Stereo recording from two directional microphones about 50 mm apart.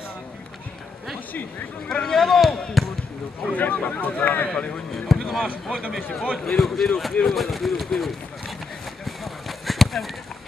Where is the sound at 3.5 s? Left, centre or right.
Left.